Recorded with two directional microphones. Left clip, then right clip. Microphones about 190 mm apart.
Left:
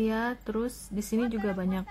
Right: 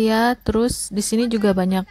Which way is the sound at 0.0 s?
40° right (ahead or behind).